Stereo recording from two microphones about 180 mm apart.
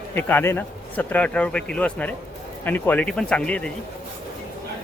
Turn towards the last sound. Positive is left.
turn(degrees=5)  # may be behind; listen again after turning